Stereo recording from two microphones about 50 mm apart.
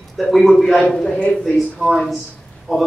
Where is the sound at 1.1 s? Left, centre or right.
Left.